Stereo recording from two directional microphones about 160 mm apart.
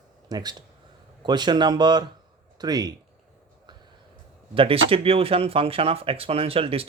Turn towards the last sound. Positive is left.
turn(degrees=-35)  # may be behind; listen again after turning